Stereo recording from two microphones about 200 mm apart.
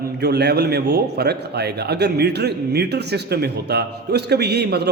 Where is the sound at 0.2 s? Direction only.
55° right (ahead or behind).